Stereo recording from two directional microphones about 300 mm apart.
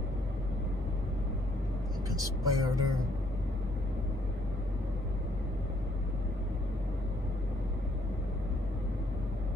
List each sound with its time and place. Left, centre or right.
2.0 s speech: centre